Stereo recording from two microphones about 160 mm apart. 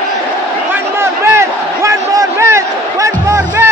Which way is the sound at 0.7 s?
15° right (ahead or behind).